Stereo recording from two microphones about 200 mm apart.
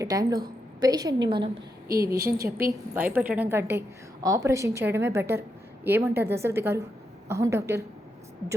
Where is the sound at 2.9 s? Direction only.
10° right (ahead or behind).